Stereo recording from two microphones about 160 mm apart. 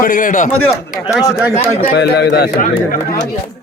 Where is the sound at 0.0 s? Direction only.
60° left (ahead or behind).